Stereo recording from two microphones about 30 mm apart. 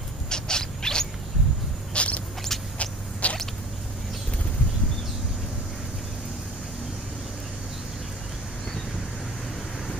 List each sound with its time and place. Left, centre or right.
0.3 s mechanisms: left
2.0 s rodents: left
2.8 s a sound: left